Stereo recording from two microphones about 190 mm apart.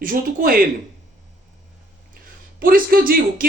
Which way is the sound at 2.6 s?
50° right (ahead or behind).